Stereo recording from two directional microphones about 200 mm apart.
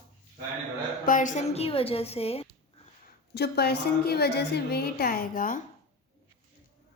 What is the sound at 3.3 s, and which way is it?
A woman's voice, 55° left (ahead or behind).